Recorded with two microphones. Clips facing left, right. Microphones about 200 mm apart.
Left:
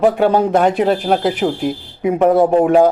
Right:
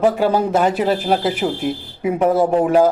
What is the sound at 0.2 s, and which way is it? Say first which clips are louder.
Speech: left 3 dB; 60° left (ahead or behind).